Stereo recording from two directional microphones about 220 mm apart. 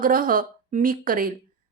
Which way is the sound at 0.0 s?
40° right (ahead or behind).